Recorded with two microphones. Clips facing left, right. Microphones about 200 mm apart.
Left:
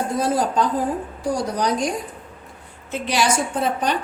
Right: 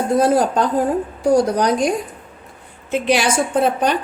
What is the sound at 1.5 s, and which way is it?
Speech, 60° right (ahead or behind).